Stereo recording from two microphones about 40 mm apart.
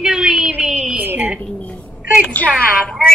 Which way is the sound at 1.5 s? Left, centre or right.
Left.